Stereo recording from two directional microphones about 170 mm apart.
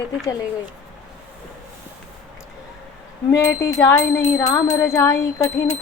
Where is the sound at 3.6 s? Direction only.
20° left (ahead or behind).